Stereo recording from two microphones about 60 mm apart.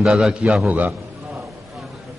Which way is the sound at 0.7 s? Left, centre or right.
Right.